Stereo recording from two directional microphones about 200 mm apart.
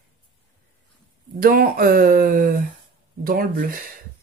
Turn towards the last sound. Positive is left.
turn(degrees=-45)  # may be behind; listen again after turning